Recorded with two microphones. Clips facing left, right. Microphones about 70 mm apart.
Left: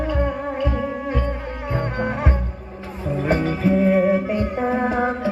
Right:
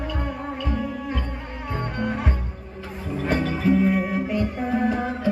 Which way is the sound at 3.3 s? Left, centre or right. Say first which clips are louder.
Left 1 dB; left.